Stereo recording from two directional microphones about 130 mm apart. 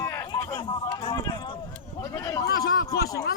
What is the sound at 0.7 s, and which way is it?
Speech, 35° left (ahead or behind).